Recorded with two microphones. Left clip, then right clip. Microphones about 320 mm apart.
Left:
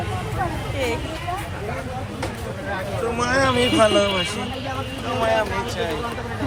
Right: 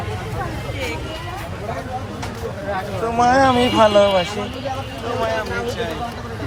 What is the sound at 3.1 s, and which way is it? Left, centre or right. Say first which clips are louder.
Speech: right 6 dB; right.